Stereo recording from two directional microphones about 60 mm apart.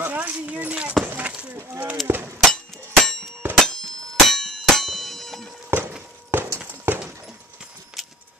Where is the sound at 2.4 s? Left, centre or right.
Centre.